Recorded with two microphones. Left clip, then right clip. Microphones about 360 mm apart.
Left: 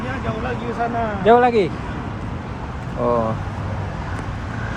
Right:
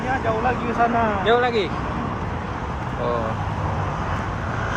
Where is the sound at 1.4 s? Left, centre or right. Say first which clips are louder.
Left 5 dB; left.